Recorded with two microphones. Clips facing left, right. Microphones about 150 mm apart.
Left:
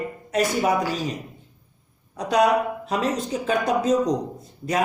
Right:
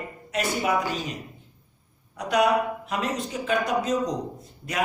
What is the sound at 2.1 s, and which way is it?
Speech, 35° left (ahead or behind).